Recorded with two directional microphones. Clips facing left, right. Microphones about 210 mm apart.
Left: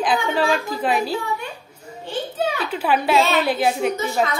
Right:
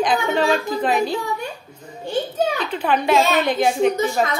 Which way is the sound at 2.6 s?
5° left (ahead or behind).